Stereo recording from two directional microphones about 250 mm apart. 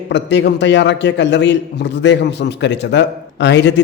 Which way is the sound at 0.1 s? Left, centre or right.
Left.